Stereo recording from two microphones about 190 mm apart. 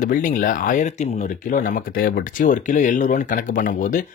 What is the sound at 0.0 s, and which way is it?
Speech, 40° left (ahead or behind).